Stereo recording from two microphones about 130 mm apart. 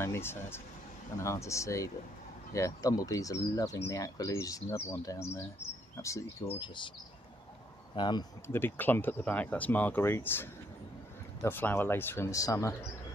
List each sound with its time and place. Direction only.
0.0 s speech: 20° left (ahead or behind)
6.6 s speech: 40° left (ahead or behind)
7.9 s speech: 35° left (ahead or behind)
8.5 s speech: 15° left (ahead or behind)